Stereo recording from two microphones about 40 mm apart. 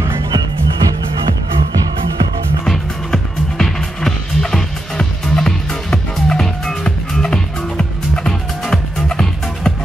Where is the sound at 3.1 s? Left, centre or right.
Centre.